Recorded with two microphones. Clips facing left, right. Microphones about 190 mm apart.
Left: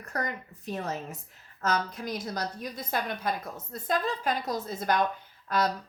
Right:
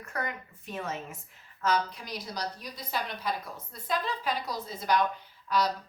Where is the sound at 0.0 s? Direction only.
40° left (ahead or behind).